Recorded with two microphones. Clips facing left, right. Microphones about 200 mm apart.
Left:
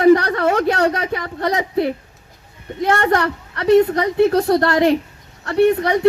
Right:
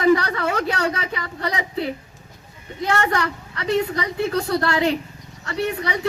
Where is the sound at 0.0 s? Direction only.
60° left (ahead or behind).